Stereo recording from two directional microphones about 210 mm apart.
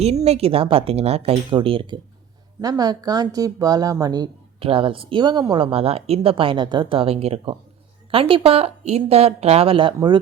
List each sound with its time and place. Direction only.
0.3 s speech: 30° right (ahead or behind)